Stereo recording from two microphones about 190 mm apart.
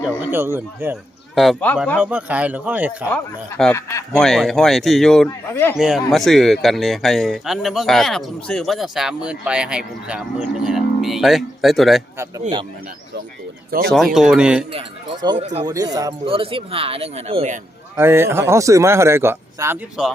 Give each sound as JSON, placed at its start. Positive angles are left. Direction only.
{"t": 0.2, "sound": "speech", "side_deg": -10}
{"t": 1.4, "sound": "speech", "side_deg": 5}
{"t": 2.0, "sound": "speech", "side_deg": -10}
{"t": 3.6, "sound": "a man's voice", "side_deg": 10}
{"t": 4.1, "sound": "speech", "side_deg": 5}
{"t": 5.5, "sound": "a man's voice", "side_deg": 15}
{"t": 5.7, "sound": "speech", "side_deg": 0}
{"t": 13.7, "sound": "speech", "side_deg": -50}
{"t": 13.9, "sound": "speech", "side_deg": 0}
{"t": 14.7, "sound": "speech", "side_deg": -25}
{"t": 15.6, "sound": "speech", "side_deg": -20}
{"t": 16.2, "sound": "speech", "side_deg": -30}
{"t": 17.9, "sound": "speech", "side_deg": -15}